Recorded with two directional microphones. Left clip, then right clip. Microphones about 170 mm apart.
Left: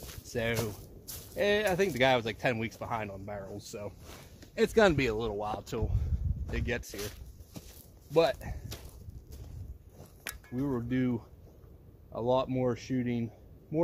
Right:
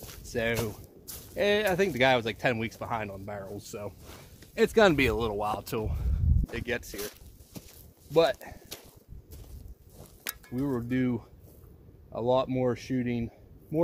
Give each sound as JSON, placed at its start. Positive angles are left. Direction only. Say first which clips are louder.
{"t": 0.2, "sound": "walk", "louder": "right 3 dB", "side_deg": -20}
{"t": 1.0, "sound": "a sound", "louder": "even", "side_deg": 0}
{"t": 1.3, "sound": "speech", "louder": "right 2 dB", "side_deg": -20}
{"t": 3.4, "sound": "speech", "louder": "right 2 dB", "side_deg": -30}
{"t": 6.4, "sound": "a sound", "louder": "right 2 dB", "side_deg": -20}
{"t": 8.1, "sound": "speech", "louder": "right 2 dB", "side_deg": -15}
{"t": 10.6, "sound": "speech", "louder": "right 2 dB", "side_deg": -20}